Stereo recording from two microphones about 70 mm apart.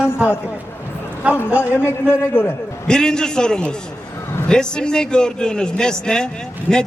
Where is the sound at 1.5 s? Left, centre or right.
Left.